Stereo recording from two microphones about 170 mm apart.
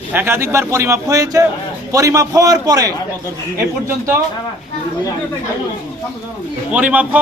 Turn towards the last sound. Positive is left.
turn(degrees=-10)  # may be behind; listen again after turning